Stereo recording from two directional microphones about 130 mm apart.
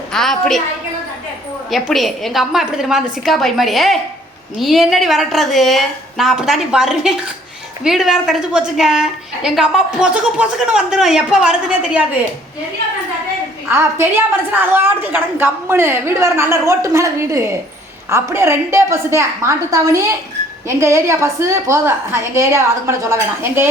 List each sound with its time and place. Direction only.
0.1 s a woman's voice: 5° left (ahead or behind)
1.7 s a woman's voice: centre (ahead or behind)
13.7 s a woman's voice: 20° right (ahead or behind)